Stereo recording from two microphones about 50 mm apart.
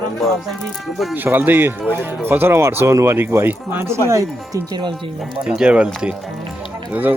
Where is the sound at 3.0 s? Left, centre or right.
Right.